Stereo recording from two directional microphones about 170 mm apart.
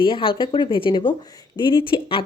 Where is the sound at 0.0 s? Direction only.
30° left (ahead or behind).